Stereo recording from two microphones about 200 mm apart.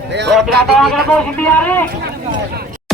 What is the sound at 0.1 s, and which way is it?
Speech, 60° right (ahead or behind).